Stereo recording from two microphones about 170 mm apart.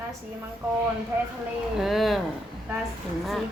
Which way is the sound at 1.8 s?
Centre (ahead or behind).